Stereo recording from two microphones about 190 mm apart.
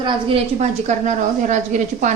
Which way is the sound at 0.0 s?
30° right (ahead or behind).